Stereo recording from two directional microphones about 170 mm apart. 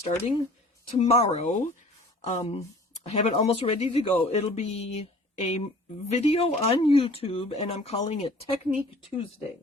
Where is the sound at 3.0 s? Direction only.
40° left (ahead or behind).